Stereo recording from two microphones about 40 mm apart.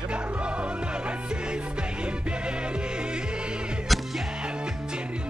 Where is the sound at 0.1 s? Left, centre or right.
Right.